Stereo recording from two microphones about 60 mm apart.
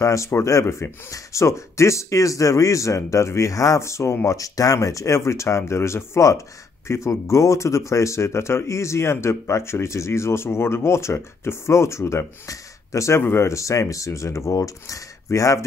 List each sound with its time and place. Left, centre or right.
0.0 s speech: left
4.3 s speech: left
13.2 s speech: left
15.2 s speech: left